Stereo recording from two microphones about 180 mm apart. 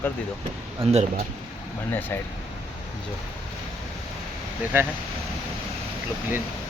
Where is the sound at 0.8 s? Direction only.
30° right (ahead or behind).